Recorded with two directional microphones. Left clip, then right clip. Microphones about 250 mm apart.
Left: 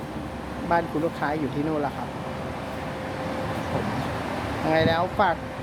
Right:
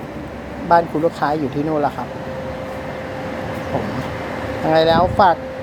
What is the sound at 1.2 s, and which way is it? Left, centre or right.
Speech, centre.